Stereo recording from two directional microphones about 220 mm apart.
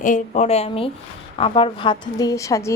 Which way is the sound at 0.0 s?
35° left (ahead or behind).